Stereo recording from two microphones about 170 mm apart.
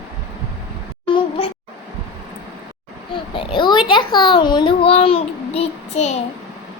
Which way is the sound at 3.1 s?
30° left (ahead or behind).